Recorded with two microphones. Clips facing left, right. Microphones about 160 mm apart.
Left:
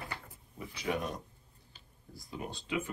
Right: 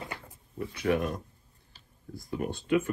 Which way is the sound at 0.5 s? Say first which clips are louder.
Right 7 dB; 55° right (ahead or behind).